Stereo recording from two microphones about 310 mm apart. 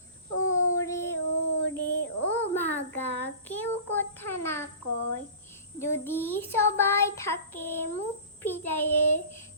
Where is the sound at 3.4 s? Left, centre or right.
Centre.